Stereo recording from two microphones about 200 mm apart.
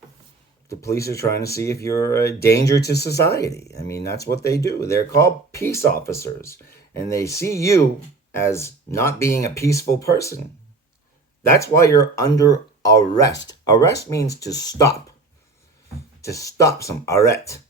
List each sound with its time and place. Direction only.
0.7 s speech: 15° left (ahead or behind)
2.8 s speech: 55° left (ahead or behind)
3.3 s speech: 15° left (ahead or behind)
11.4 s speech: 15° left (ahead or behind)
16.2 s speech: 15° left (ahead or behind)